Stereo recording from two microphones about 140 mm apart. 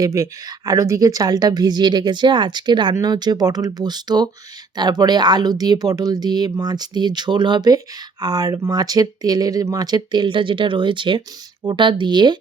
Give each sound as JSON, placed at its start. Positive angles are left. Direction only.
{"t": 0.0, "sound": "speech", "side_deg": -25}